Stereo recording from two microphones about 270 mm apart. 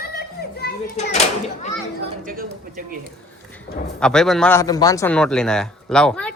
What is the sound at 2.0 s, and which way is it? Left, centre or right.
Speech, right.